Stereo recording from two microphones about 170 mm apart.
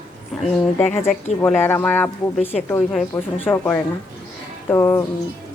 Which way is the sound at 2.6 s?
15° left (ahead or behind).